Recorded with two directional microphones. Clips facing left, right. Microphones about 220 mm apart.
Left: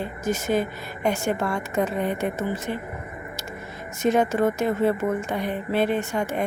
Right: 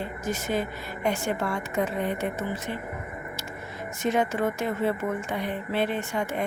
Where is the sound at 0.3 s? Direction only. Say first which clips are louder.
Left 5 dB; 45° left (ahead or behind).